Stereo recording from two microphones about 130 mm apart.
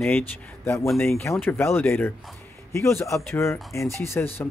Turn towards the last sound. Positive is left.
turn(degrees=20)  # may be behind; listen again after turning